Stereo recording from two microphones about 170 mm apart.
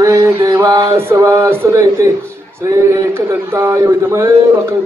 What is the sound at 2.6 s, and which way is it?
A man's voice, 20° right (ahead or behind).